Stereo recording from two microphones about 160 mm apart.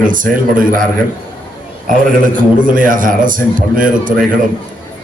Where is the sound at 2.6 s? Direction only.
55° right (ahead or behind).